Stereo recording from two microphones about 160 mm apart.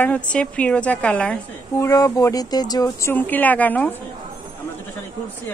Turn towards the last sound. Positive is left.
turn(degrees=10)  # may be behind; listen again after turning